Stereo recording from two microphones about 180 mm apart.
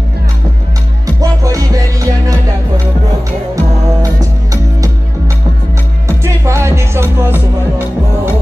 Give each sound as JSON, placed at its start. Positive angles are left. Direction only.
{"t": 1.0, "sound": "music", "side_deg": -20}
{"t": 3.5, "sound": "music", "side_deg": -20}
{"t": 6.0, "sound": "music", "side_deg": -15}